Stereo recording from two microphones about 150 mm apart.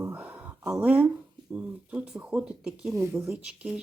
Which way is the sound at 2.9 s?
20° right (ahead or behind).